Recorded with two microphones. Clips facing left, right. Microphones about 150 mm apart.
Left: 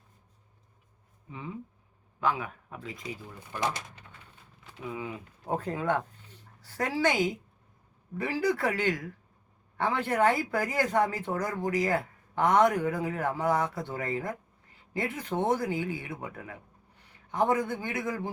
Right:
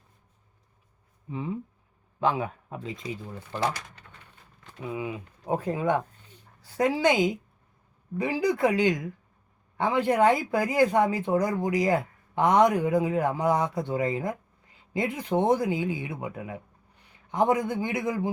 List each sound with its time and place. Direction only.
2.2 s speech: 25° right (ahead or behind)
4.9 s speech: 10° right (ahead or behind)